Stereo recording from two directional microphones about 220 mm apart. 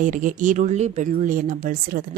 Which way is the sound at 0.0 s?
35° right (ahead or behind).